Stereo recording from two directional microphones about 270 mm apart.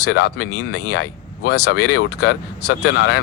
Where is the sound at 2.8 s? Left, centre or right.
Left.